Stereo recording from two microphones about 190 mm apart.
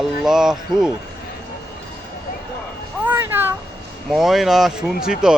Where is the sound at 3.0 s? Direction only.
10° right (ahead or behind).